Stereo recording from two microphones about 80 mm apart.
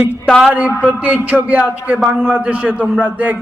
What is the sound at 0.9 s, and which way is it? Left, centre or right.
A man's voice, centre.